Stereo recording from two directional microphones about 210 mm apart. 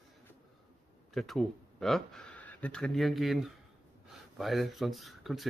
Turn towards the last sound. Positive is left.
turn(degrees=0)  # may be behind; listen again after turning